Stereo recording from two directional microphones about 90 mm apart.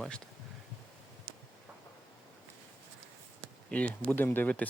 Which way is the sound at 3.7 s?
15° left (ahead or behind).